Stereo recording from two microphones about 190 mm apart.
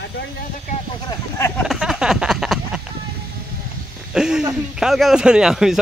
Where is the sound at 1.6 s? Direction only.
Centre (ahead or behind).